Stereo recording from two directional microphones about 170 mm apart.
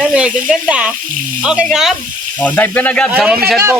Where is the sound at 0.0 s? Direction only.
5° right (ahead or behind).